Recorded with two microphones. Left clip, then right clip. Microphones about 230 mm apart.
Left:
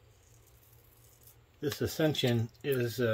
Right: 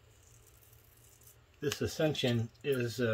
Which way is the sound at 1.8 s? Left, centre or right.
Centre.